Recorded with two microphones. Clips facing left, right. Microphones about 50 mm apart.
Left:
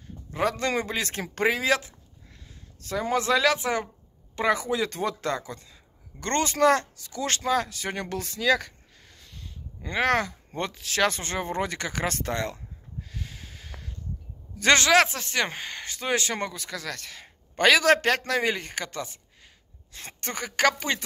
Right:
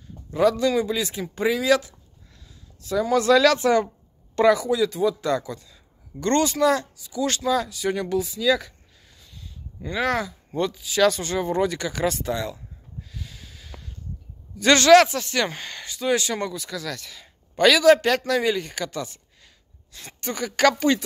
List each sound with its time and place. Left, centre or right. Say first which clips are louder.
0.3 s speech: right 6 dB; left
4.5 s speech: right 5 dB; left
4.9 s speech: right 6 dB; left
5.3 s speech: right 6 dB; left
12.2 s a sound: right 2 dB; left
13.3 s a sound: left 1 dB; left
14.6 s speech: right 5 dB; left
15.8 s speech: right 4 dB; left
20.1 s speech: right 5 dB; left